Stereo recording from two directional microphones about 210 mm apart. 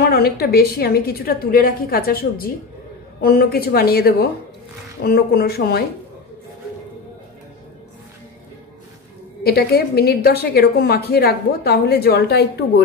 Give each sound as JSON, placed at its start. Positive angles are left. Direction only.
{"t": 0.1, "sound": "a woman's voice", "side_deg": 50}
{"t": 9.4, "sound": "a woman's voice", "side_deg": 50}